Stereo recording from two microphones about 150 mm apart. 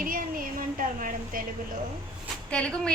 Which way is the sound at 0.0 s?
70° right (ahead or behind).